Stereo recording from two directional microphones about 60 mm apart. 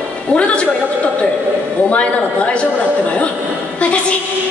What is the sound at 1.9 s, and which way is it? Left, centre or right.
Speech, left.